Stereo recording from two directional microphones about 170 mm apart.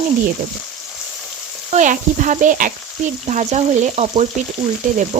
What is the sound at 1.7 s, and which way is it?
Speech, 45° right (ahead or behind).